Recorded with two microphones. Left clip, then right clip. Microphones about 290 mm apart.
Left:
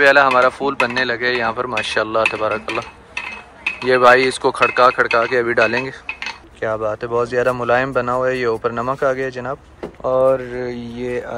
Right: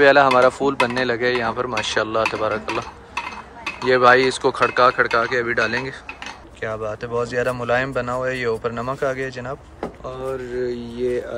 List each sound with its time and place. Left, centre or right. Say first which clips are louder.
0.0 s speech: left 1 dB; centre
10.5 s speech: even; centre